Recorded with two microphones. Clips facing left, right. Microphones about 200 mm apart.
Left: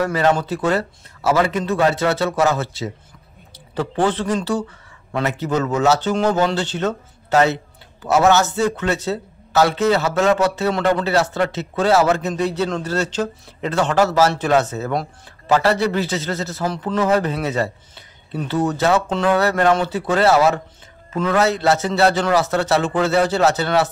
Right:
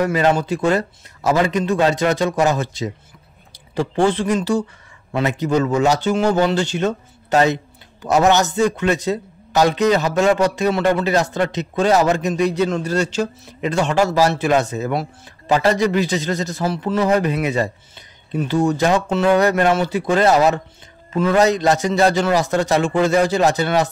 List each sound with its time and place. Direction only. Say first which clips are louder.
0.0 s a man's voice: right 1 dB; 15° right (ahead or behind)